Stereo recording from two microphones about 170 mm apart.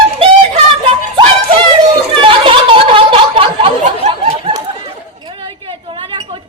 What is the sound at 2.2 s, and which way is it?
Snicker, 30° right (ahead or behind).